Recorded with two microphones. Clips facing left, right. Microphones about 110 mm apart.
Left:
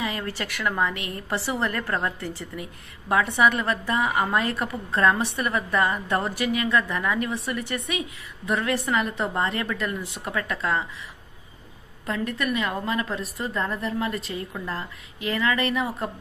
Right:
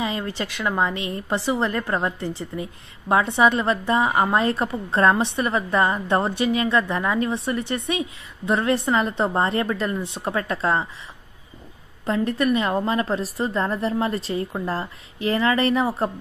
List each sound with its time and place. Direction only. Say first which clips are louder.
0.0 s a woman's voice: right 3 dB; 20° right (ahead or behind)
12.1 s a woman's voice: right 6 dB; 30° right (ahead or behind)